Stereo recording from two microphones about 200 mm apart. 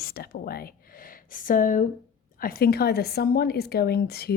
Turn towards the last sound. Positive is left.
turn(degrees=50)  # may be behind; listen again after turning